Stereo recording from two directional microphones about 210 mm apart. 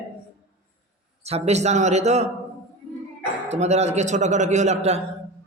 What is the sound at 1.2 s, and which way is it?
A man's voice, 30° right (ahead or behind).